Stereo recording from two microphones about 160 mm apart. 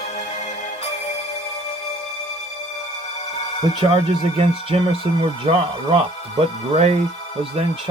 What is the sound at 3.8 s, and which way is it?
Speech, 30° right (ahead or behind).